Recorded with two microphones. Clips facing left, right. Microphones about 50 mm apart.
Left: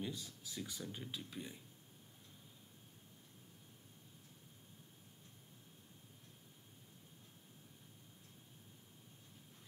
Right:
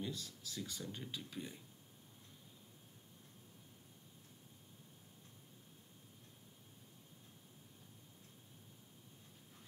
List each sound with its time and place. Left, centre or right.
0.0 s speech: centre
0.8 s speech: centre